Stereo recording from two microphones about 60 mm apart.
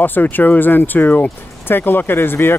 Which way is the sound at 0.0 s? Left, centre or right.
Left.